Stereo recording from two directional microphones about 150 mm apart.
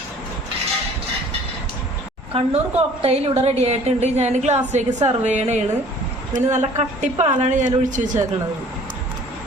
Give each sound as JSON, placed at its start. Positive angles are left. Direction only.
{"t": 2.3, "sound": "a woman's voice", "side_deg": -40}